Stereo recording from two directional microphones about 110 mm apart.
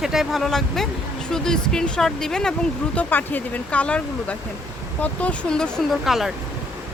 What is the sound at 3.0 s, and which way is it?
Speech, 15° left (ahead or behind).